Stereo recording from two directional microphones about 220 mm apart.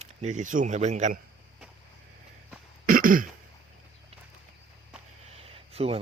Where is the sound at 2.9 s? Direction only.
40° right (ahead or behind).